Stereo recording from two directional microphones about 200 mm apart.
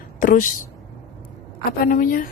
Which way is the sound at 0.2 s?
45° left (ahead or behind).